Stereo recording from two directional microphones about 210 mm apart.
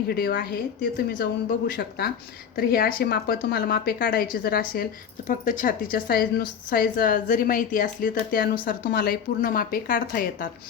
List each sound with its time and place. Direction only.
0.1 s a woman's voice: 45° left (ahead or behind)